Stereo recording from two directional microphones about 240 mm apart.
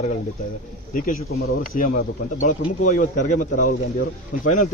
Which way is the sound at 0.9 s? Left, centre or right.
Left.